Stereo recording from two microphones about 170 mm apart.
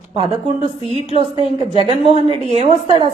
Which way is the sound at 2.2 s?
35° right (ahead or behind).